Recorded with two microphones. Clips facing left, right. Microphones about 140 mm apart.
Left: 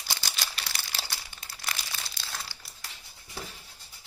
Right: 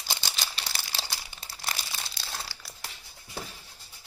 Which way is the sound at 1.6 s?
25° right (ahead or behind).